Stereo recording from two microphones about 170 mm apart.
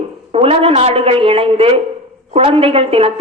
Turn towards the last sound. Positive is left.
turn(degrees=-35)  # may be behind; listen again after turning